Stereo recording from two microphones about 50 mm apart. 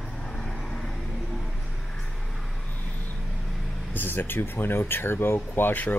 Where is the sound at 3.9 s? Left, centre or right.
Left.